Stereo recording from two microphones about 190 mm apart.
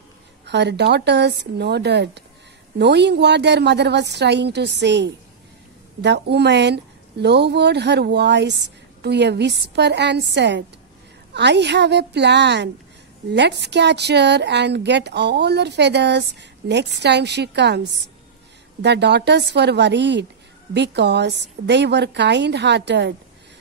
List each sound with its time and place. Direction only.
0.5 s speech: 65° right (ahead or behind)